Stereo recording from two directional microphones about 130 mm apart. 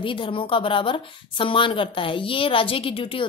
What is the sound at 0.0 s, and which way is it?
A woman's voice, 40° left (ahead or behind).